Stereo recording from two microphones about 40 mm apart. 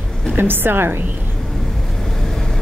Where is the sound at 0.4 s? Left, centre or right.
Right.